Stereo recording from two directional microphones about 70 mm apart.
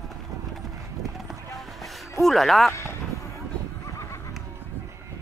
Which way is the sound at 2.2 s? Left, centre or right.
Centre.